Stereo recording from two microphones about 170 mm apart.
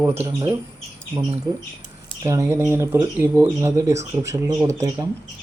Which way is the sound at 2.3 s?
15° right (ahead or behind).